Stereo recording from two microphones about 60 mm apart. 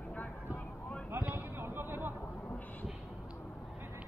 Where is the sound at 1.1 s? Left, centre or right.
Right.